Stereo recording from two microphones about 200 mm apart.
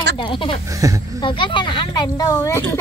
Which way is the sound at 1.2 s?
25° left (ahead or behind).